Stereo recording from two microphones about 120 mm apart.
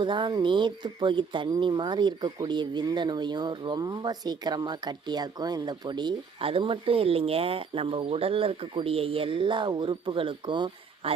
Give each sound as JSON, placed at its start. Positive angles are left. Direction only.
{"t": 0.0, "sound": "speech", "side_deg": -40}